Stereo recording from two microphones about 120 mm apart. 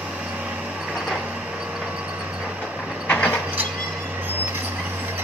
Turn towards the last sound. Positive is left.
turn(degrees=10)  # may be behind; listen again after turning